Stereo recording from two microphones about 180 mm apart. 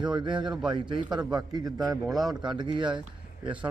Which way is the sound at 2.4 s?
25° right (ahead or behind).